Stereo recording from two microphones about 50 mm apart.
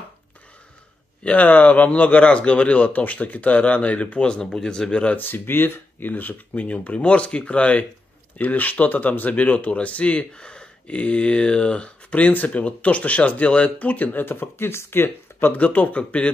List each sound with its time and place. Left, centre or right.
1.2 s speech: left
4.2 s speech: centre
5.1 s speech: left
15.5 s speech: left